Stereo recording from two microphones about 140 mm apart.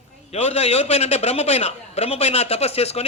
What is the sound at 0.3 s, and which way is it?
A man's voice, 50° left (ahead or behind).